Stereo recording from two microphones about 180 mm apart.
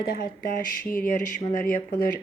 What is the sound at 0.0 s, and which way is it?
Speech, 55° left (ahead or behind).